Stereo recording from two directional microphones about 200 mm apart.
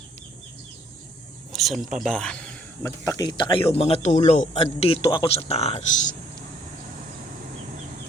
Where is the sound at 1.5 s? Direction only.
Centre (ahead or behind); by 6.1 s 35° left (ahead or behind).